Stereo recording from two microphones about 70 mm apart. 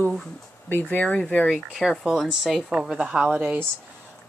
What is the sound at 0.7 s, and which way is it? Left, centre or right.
Speech, left.